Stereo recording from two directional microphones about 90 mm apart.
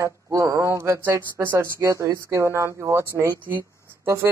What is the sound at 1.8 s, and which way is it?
Speech, 35° right (ahead or behind).